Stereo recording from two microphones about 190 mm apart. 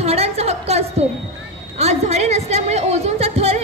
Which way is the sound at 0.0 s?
35° right (ahead or behind).